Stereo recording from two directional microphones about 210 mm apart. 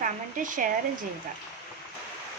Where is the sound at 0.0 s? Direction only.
40° right (ahead or behind).